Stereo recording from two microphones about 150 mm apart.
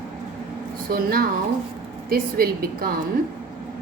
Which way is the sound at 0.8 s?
75° right (ahead or behind).